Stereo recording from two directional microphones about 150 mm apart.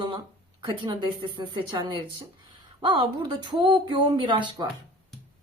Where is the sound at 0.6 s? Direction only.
30° right (ahead or behind).